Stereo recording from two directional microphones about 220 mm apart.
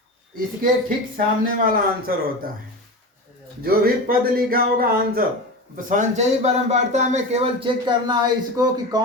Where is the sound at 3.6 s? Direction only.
40° right (ahead or behind).